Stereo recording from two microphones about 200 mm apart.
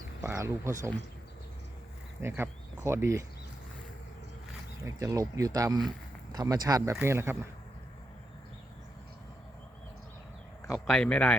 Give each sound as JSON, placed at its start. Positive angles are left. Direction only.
{"t": 0.2, "sound": "speech", "side_deg": -15}
{"t": 2.2, "sound": "speech", "side_deg": -10}
{"t": 4.8, "sound": "speech", "side_deg": -15}
{"t": 10.8, "sound": "speech", "side_deg": 5}